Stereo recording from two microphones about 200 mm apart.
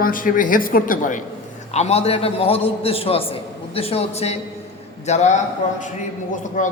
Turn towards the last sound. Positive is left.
turn(degrees=40)  # may be behind; listen again after turning